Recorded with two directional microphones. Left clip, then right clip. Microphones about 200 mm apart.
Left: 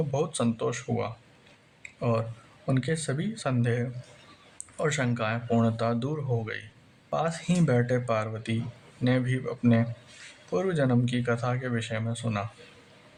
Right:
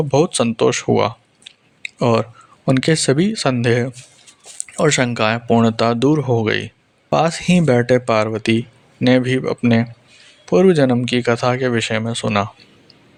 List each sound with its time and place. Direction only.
0.1 s speech: 35° right (ahead or behind)